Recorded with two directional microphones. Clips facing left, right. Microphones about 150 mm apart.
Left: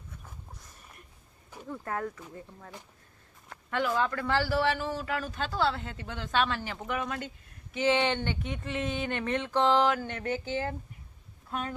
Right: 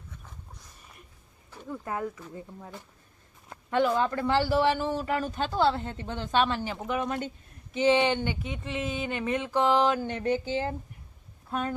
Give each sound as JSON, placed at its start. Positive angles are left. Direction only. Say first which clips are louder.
{"t": 1.6, "sound": "speech", "louder": "right 2 dB", "side_deg": -5}
{"t": 9.9, "sound": "speech", "louder": "right 4 dB", "side_deg": -25}